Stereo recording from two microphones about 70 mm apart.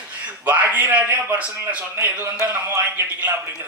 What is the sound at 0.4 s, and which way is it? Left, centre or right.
A man's voice, right.